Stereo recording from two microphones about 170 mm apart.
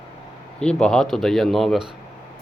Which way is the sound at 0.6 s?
5° left (ahead or behind).